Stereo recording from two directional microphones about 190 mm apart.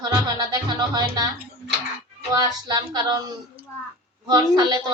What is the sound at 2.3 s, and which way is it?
Speech, 20° right (ahead or behind).